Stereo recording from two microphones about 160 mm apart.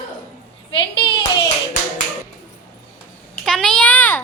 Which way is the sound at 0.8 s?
30° left (ahead or behind).